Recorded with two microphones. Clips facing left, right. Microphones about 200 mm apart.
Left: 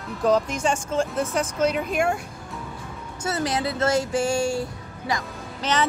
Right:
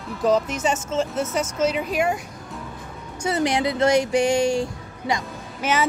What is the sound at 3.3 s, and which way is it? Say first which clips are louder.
Speech: right 4 dB; 20° right (ahead or behind).